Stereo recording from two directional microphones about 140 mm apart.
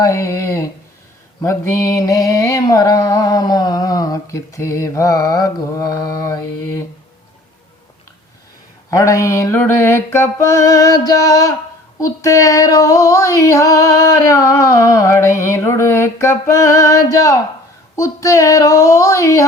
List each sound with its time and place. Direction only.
0.0 s mantra: 20° left (ahead or behind)
8.9 s mantra: 25° left (ahead or behind)